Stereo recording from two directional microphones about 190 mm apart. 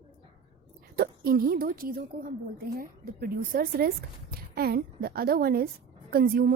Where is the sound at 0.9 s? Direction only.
55° right (ahead or behind).